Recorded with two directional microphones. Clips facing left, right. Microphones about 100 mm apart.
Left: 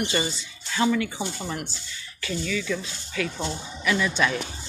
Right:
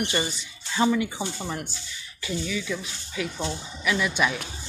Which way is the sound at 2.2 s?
15° right (ahead or behind).